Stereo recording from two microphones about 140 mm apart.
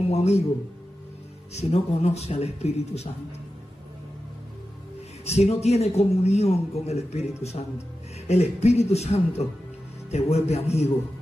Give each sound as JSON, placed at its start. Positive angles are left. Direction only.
{"t": 0.1, "sound": "a man's voice", "side_deg": 50}
{"t": 1.5, "sound": "a man's voice", "side_deg": 50}
{"t": 5.2, "sound": "a man's voice", "side_deg": 50}
{"t": 8.3, "sound": "a man's voice", "side_deg": 50}